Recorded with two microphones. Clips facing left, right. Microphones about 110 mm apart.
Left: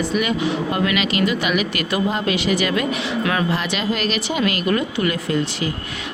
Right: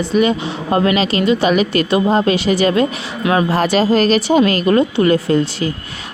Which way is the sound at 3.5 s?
40° right (ahead or behind).